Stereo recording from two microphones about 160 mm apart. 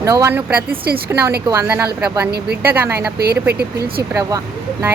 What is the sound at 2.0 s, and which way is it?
Speech, 5° right (ahead or behind).